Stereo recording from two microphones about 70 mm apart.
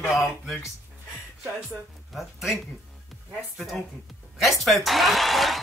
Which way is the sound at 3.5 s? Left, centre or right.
Centre.